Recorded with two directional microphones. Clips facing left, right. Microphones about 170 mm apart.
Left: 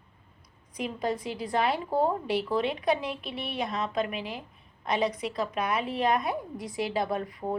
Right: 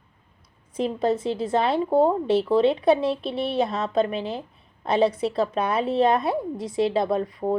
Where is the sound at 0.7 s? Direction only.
25° right (ahead or behind).